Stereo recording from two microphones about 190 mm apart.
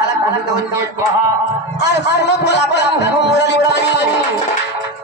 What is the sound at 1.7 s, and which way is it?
A man's voice, 65° left (ahead or behind).